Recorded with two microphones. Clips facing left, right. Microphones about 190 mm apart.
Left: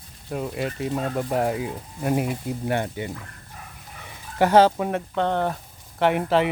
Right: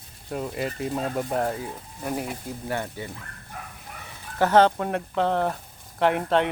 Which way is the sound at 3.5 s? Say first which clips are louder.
Right 4 dB; 60° right (ahead or behind).